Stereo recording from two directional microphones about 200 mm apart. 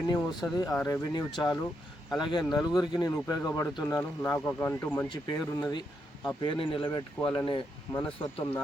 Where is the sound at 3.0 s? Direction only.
15° left (ahead or behind).